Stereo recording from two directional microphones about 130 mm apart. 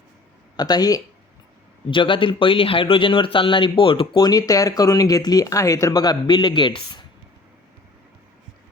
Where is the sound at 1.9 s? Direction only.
40° left (ahead or behind).